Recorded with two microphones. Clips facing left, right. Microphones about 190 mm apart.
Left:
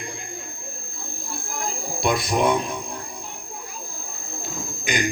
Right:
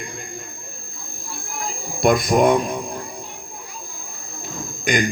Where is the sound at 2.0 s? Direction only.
50° right (ahead or behind).